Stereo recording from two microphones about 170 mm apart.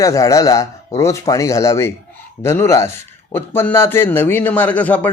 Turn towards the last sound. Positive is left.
turn(degrees=10)  # may be behind; listen again after turning